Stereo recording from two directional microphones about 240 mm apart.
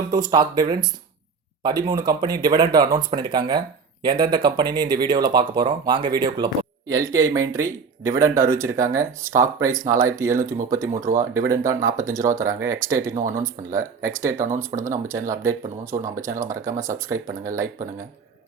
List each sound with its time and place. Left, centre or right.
0.1 s speech: centre